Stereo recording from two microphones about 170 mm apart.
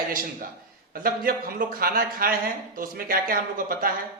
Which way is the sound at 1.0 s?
60° right (ahead or behind).